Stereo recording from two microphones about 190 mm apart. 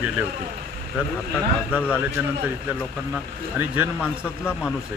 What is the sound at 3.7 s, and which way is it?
Speech, 10° right (ahead or behind).